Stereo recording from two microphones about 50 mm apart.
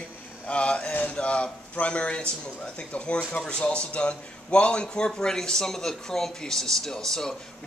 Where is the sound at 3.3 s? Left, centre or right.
Left.